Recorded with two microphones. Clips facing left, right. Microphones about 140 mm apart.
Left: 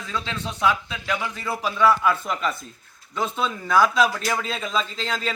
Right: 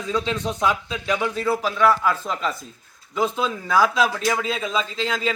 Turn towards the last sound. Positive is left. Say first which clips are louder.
# right 3 dB
turn(degrees=-5)  # may be behind; listen again after turning